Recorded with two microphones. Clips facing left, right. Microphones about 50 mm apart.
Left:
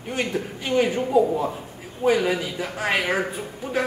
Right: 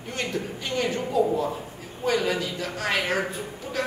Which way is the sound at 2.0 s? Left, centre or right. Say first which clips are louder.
Left 4 dB; centre.